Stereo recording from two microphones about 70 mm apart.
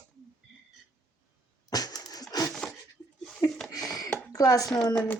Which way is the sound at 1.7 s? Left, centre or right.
Left.